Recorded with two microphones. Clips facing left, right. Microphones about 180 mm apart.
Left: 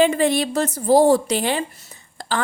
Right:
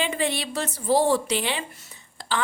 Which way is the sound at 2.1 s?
45° left (ahead or behind).